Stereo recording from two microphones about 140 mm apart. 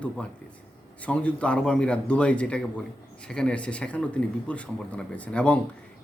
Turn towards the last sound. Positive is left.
turn(degrees=10)  # may be behind; listen again after turning